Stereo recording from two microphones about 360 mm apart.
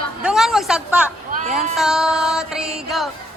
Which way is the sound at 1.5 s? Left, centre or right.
Centre.